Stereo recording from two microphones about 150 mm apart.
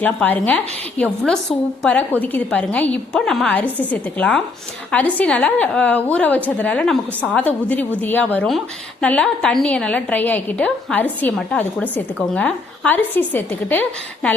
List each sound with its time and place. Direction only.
0.0 s a woman's voice: 10° left (ahead or behind)